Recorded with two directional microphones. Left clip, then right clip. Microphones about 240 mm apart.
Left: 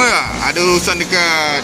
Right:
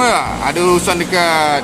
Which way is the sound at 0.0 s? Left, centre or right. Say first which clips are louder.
Even; centre.